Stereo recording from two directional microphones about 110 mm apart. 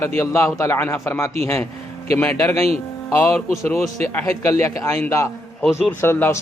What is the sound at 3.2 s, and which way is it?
A man's voice, 25° left (ahead or behind).